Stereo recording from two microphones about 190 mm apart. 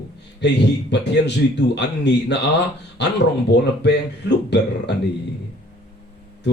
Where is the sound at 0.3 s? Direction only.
65° left (ahead or behind).